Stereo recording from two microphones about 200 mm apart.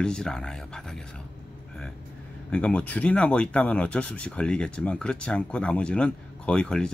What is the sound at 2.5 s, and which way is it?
Speech, 5° left (ahead or behind).